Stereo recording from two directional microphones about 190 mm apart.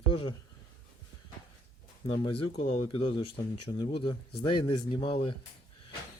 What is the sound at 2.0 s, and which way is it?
Speech, 30° left (ahead or behind).